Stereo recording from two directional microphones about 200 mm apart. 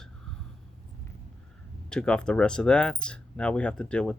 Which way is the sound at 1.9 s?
5° left (ahead or behind).